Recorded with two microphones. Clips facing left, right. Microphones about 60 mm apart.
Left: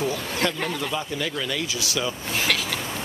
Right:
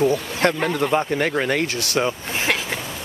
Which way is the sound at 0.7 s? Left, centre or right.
Right.